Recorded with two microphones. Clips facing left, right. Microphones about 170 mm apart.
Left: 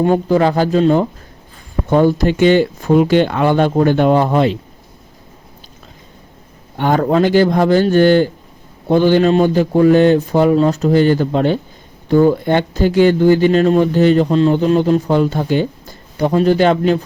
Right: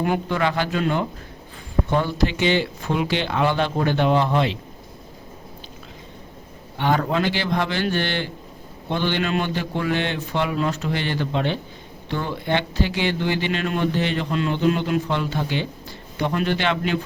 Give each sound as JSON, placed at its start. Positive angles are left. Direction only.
{"t": 0.0, "sound": "speech", "side_deg": 35}
{"t": 1.9, "sound": "speech", "side_deg": 45}
{"t": 6.7, "sound": "speech", "side_deg": 45}